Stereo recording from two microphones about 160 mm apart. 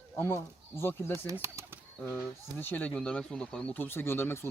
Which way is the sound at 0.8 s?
15° left (ahead or behind).